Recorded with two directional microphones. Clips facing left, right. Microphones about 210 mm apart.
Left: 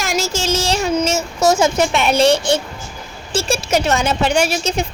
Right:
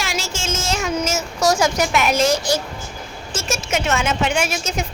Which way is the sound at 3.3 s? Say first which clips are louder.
Left 6 dB; 35° left (ahead or behind).